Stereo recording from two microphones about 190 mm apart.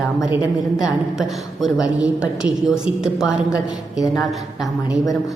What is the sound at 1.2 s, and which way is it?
A woman's voice, centre (ahead or behind).